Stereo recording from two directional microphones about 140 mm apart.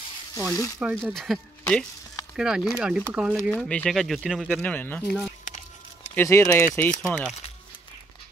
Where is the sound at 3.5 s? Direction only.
10° left (ahead or behind).